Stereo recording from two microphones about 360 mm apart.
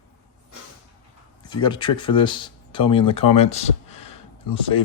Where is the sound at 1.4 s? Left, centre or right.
Centre.